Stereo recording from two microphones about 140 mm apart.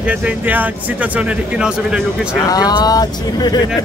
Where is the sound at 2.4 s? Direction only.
30° left (ahead or behind).